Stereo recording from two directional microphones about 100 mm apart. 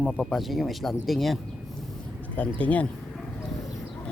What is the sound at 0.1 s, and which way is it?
Speech, centre (ahead or behind).